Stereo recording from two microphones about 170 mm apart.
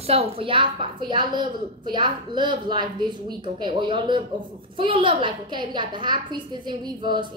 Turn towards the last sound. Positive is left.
turn(degrees=-25)  # may be behind; listen again after turning